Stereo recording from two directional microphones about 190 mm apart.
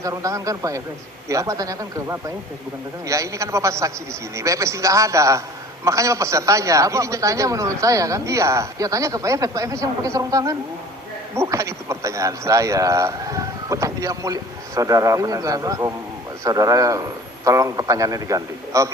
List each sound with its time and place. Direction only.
0.0 s a man's voice: 15° right (ahead or behind)